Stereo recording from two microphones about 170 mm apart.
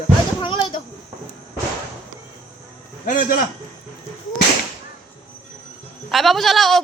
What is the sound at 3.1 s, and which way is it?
Speech, 55° left (ahead or behind).